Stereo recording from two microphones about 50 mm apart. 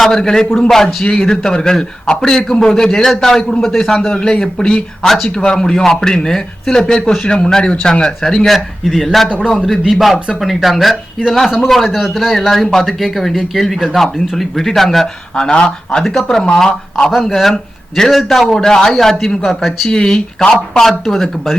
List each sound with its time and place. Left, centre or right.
0.0 s a man's voice: centre
8.5 s speech: centre
15.4 s a man's voice: centre
16.0 s a man's voice: centre
17.1 s a man's voice: centre
19.9 s a man's voice: centre